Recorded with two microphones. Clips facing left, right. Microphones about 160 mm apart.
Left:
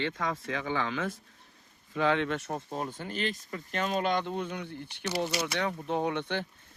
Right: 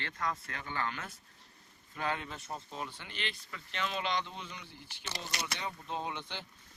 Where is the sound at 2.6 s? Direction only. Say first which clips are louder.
Left 8 dB; 45° left (ahead or behind).